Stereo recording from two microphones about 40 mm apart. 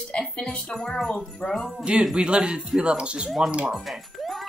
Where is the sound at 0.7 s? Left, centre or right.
Centre.